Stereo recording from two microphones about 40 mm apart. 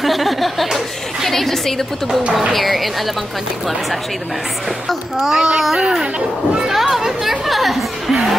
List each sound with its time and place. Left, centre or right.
0.0 s a sound: centre
2.5 s speech: centre
5.1 s speech: centre
6.7 s chatter: centre
8.1 s music: centre